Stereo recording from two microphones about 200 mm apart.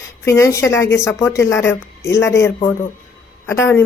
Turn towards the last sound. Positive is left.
turn(degrees=10)  # may be behind; listen again after turning